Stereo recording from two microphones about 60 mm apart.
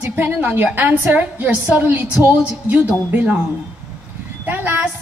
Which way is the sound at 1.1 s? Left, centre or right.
Right.